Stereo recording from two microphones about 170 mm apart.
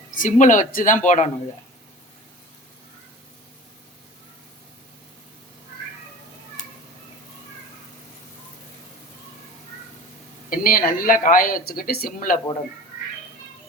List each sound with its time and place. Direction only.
0.1 s a woman's voice: 50° left (ahead or behind)
10.5 s speech: 55° left (ahead or behind)